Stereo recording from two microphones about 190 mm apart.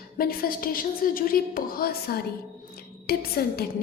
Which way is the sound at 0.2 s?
50° left (ahead or behind).